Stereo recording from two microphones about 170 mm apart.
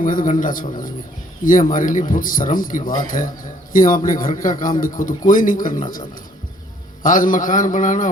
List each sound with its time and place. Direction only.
0.0 s speech: 50° left (ahead or behind)